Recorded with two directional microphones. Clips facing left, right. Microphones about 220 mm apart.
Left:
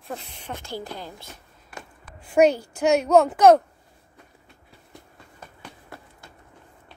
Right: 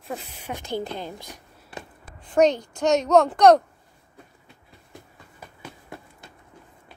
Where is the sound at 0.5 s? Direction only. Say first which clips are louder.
Right 5 dB; 20° right (ahead or behind).